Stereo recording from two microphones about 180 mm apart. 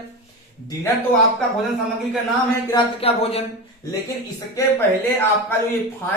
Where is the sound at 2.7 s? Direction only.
30° left (ahead or behind).